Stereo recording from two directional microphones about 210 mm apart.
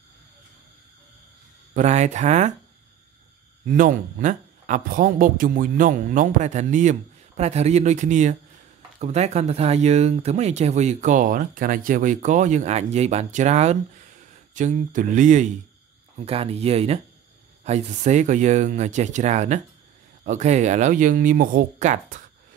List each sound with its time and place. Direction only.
1.7 s a woman's voice: 35° right (ahead or behind)
3.6 s a woman's voice: 40° right (ahead or behind)